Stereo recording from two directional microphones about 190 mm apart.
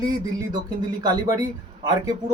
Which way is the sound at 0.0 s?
20° right (ahead or behind).